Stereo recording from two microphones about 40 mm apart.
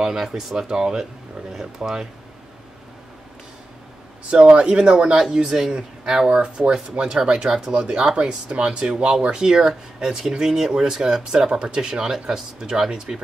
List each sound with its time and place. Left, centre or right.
0.2 s speech: centre
4.3 s speech: right
7.4 s speech: centre
7.7 s speech: right